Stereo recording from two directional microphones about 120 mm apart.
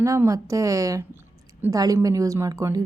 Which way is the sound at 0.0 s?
25° right (ahead or behind).